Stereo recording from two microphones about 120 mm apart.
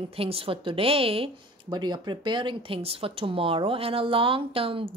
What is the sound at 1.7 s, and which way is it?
Speech, 35° right (ahead or behind).